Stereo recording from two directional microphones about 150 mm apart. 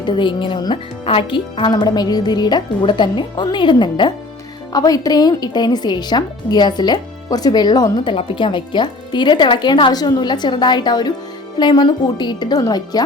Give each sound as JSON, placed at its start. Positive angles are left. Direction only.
{"t": 0.0, "sound": "speech", "side_deg": 30}